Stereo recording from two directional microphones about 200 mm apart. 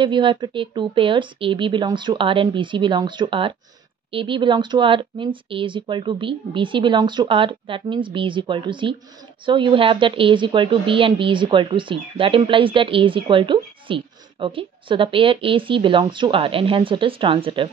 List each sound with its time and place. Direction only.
0.0 s a woman's voice: 25° right (ahead or behind)